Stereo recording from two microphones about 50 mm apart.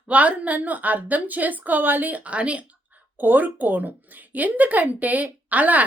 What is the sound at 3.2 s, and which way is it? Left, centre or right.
A woman's voice, right.